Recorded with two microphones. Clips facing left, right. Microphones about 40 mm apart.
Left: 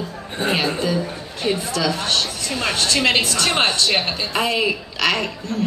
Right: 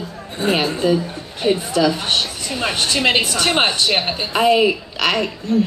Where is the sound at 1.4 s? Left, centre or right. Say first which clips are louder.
Right 5 dB; right.